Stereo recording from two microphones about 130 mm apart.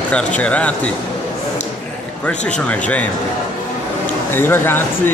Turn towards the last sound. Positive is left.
turn(degrees=15)  # may be behind; listen again after turning